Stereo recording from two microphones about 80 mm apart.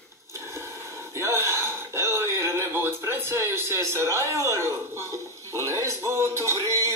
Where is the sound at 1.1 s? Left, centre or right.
Right.